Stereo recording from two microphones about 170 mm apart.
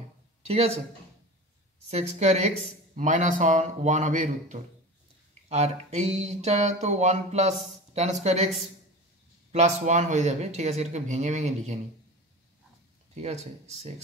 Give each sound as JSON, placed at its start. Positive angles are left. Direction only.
{"t": 0.5, "sound": "speech", "side_deg": -40}
{"t": 1.9, "sound": "a man's voice", "side_deg": -40}
{"t": 9.5, "sound": "speech", "side_deg": -40}
{"t": 13.2, "sound": "speech", "side_deg": -40}